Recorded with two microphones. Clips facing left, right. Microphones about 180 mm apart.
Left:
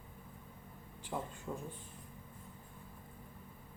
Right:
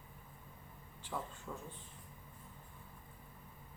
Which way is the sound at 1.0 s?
15° left (ahead or behind).